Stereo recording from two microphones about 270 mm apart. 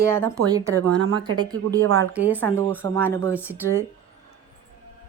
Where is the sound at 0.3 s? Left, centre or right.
Centre.